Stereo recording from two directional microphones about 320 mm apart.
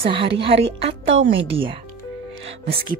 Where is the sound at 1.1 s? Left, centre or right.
Right.